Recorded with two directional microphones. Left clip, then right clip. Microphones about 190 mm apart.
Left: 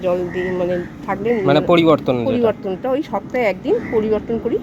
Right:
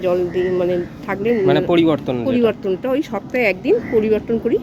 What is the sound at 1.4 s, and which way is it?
Speech, 25° left (ahead or behind).